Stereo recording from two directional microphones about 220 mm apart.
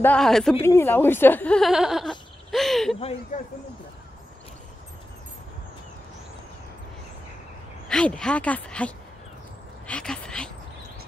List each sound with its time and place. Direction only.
0.0 s speech: 5° left (ahead or behind)
3.3 s speech: 35° left (ahead or behind)
7.9 s speech: 5° left (ahead or behind)
9.8 s a sound: 5° left (ahead or behind)